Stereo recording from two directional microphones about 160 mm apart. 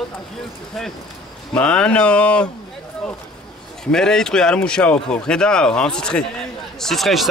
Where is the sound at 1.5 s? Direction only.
5° left (ahead or behind).